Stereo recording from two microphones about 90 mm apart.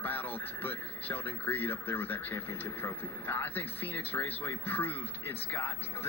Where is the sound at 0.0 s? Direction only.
20° left (ahead or behind).